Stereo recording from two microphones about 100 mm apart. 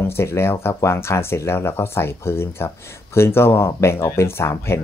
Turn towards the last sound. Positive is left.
turn(degrees=25)  # may be behind; listen again after turning